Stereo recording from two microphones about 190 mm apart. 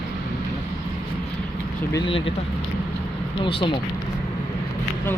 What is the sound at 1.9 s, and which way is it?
Speech, 25° left (ahead or behind).